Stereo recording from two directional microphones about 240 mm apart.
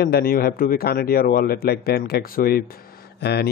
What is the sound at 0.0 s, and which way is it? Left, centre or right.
Speech, left.